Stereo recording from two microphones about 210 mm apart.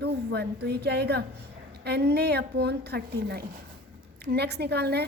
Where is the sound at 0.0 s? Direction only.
50° right (ahead or behind).